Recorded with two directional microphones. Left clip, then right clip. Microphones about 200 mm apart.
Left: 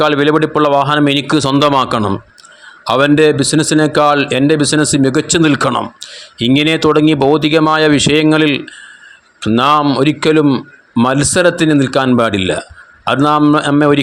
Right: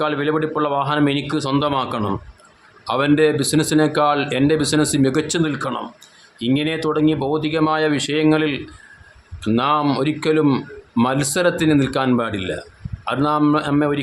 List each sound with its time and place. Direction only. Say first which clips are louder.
0.0 s a man's voice: left 9 dB; 30° left (ahead or behind)
5.4 s a man's voice: left 10 dB; 40° left (ahead or behind)
10.4 s a man's voice: left 5 dB; 15° left (ahead or behind); by 14.0 s 30° left (ahead or behind)